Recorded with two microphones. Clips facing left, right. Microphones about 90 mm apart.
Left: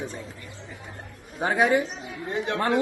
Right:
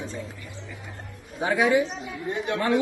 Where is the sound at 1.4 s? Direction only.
40° left (ahead or behind).